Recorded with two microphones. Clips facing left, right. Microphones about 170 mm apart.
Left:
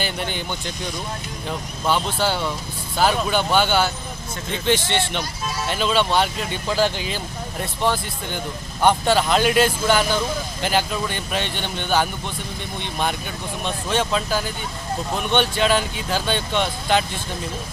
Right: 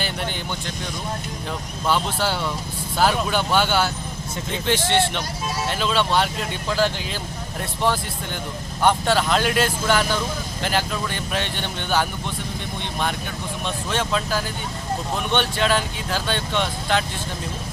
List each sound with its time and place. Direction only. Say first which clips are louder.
0.0 s speech: left 1 dB; centre (ahead or behind)
1.5 s speech: left 1 dB; 5° right (ahead or behind)
8.8 s speech: left 2 dB; centre (ahead or behind)
13.9 s speech: left 2 dB; centre (ahead or behind)